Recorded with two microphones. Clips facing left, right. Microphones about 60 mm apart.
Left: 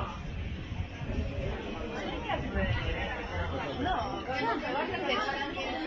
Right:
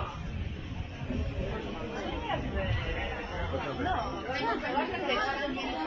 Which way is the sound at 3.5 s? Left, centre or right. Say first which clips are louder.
Right 1 dB; centre.